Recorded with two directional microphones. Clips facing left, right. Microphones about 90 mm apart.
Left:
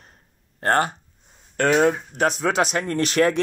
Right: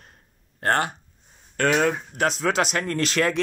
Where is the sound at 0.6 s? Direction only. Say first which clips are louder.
Left 2 dB; 35° left (ahead or behind).